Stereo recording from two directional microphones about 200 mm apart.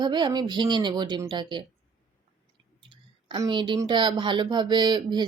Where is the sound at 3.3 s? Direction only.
25° right (ahead or behind).